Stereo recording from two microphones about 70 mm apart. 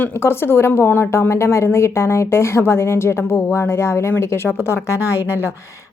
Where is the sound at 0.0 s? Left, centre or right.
Left.